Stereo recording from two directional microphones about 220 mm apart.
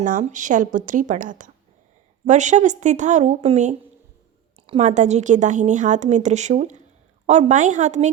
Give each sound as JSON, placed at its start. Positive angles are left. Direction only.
{"t": 0.0, "sound": "a woman's voice", "side_deg": -35}